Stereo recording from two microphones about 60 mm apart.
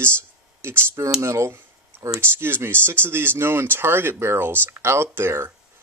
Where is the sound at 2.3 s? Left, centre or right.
Right.